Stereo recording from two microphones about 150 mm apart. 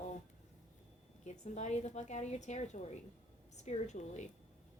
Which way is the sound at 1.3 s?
50° left (ahead or behind).